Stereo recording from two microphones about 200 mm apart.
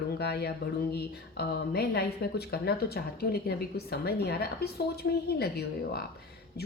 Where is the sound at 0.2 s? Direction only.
55° left (ahead or behind).